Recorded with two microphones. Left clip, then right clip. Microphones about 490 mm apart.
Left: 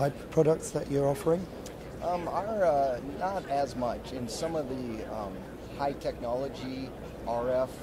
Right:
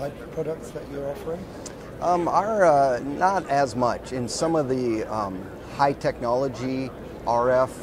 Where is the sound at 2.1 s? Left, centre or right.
Right.